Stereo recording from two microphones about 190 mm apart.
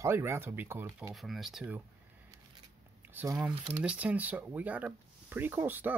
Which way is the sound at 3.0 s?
15° right (ahead or behind).